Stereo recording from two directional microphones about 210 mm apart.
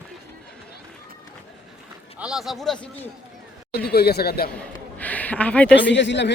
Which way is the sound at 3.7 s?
50° left (ahead or behind).